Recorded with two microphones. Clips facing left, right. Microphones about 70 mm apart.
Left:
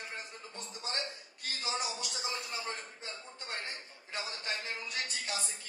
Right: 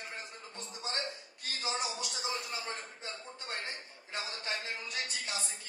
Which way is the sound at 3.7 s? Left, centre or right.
Right.